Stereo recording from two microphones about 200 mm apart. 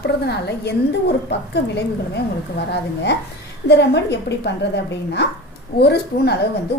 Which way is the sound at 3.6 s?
60° left (ahead or behind).